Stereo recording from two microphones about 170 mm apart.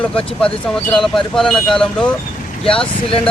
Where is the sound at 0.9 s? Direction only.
Centre (ahead or behind).